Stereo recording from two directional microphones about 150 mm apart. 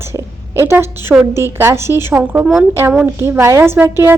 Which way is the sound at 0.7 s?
15° right (ahead or behind).